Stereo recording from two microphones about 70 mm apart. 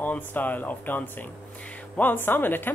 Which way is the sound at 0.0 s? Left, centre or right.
Left.